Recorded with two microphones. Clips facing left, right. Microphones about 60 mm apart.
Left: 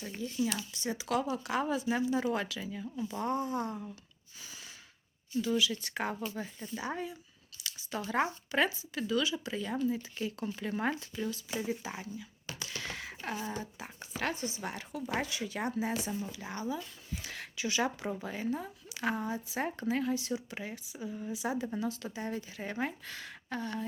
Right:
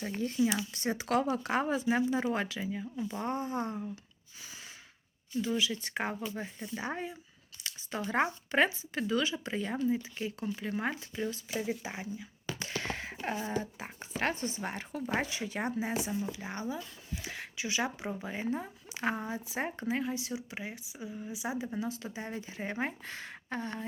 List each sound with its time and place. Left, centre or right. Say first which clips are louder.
0.0 s a woman's voice: right 4 dB; right
5.4 s a woman's voice: left 1 dB; right
9.8 s a woman's voice: right 1 dB; centre
10.4 s a woman's voice: left 1 dB; centre
11.1 s a woman's voice: right 1 dB; right
12.5 s a sound: right 3 dB; right
13.5 s a woman's voice: right 4 dB; right; by 21.1 s centre
21.1 s a woman's voice: left 2 dB; centre; by 23.8 s right